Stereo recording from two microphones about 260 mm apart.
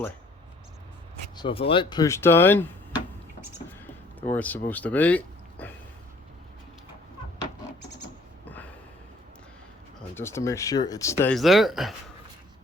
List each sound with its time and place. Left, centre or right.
1.4 s speech: left
4.3 s speech: centre
10.2 s speech: centre